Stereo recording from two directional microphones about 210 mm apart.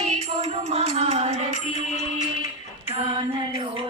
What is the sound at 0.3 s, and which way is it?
Music, 30° right (ahead or behind).